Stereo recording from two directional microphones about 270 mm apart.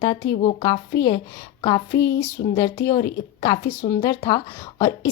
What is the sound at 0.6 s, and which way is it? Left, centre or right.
A woman's voice, centre.